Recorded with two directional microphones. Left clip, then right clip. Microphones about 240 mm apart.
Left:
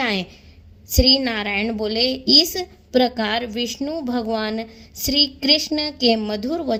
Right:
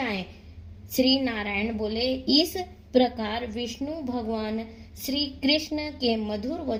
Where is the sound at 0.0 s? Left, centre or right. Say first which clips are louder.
Left 8 dB; left.